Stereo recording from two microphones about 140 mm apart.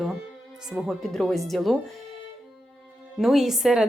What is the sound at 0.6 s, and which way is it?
A woman's voice, 5° right (ahead or behind).